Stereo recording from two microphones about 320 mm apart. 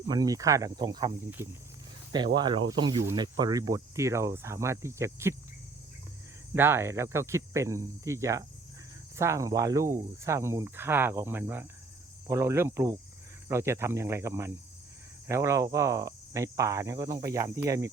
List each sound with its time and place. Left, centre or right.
0.1 s speech: centre
6.5 s speech: centre